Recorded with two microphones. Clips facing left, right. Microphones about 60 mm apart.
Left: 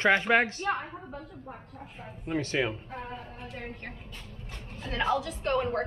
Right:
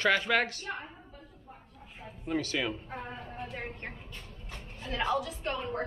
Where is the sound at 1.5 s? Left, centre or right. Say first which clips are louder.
Left 8 dB; left.